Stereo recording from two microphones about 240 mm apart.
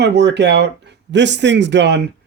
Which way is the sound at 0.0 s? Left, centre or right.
Right.